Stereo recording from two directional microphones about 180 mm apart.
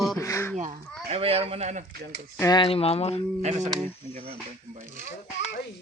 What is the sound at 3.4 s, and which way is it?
Speech, 40° right (ahead or behind).